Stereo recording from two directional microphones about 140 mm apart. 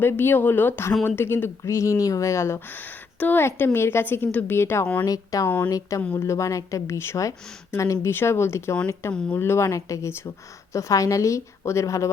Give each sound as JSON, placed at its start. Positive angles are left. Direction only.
{"t": 0.0, "sound": "a woman's voice", "side_deg": 15}